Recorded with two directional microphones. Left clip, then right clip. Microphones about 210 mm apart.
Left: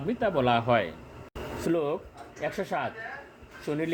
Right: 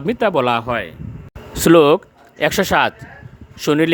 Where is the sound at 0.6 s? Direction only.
5° right (ahead or behind).